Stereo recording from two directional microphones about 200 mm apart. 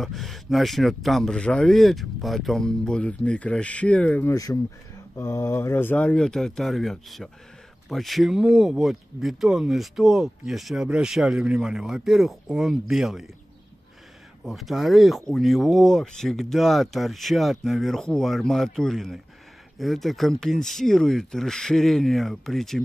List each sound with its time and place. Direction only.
0.0 s speech: centre (ahead or behind)
4.3 s speech: 20° left (ahead or behind); by 13.3 s centre (ahead or behind)
14.4 s speech: centre (ahead or behind)